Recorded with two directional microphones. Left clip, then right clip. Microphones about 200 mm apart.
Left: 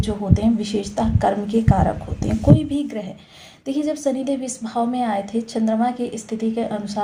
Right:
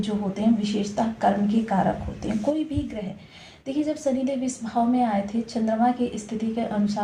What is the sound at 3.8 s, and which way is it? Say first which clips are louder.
A woman's voice: left 4 dB; 40° left (ahead or behind).